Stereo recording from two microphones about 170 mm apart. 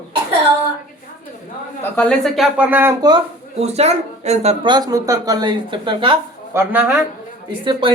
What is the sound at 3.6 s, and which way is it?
Speech, 40° right (ahead or behind).